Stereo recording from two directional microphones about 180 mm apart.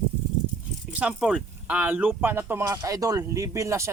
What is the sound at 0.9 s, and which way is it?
Speech, 5° right (ahead or behind).